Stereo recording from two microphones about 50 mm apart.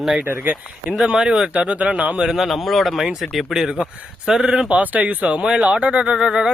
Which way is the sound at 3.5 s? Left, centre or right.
Centre.